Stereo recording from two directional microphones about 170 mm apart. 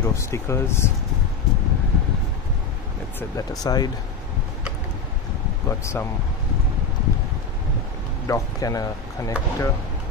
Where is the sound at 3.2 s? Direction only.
20° left (ahead or behind).